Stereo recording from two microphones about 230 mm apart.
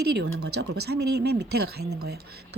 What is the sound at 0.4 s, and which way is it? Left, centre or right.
Speech, right.